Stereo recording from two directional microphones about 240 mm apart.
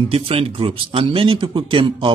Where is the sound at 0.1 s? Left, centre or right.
Right.